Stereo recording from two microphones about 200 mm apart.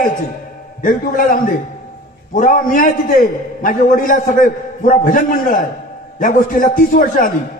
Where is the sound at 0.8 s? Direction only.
45° left (ahead or behind).